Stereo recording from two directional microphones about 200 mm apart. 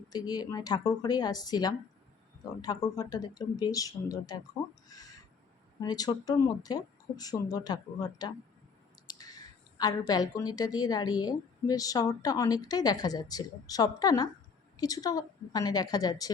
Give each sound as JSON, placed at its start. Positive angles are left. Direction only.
{"t": 0.1, "sound": "speech", "side_deg": 20}
{"t": 4.9, "sound": "a sound", "side_deg": 20}
{"t": 5.8, "sound": "speech", "side_deg": 20}